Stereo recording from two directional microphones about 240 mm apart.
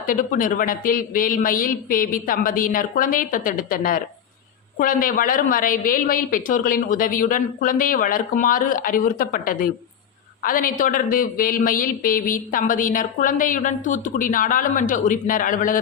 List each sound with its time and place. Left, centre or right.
0.0 s speech: left